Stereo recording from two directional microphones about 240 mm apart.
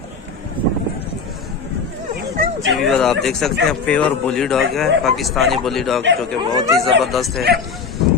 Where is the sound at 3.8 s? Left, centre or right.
Centre.